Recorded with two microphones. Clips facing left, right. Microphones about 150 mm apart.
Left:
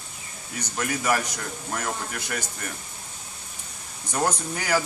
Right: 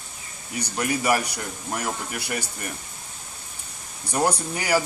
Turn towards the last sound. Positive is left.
turn(degrees=-10)  # may be behind; listen again after turning